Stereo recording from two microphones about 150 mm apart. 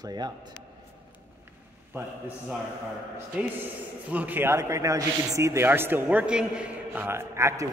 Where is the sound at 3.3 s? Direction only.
10° right (ahead or behind).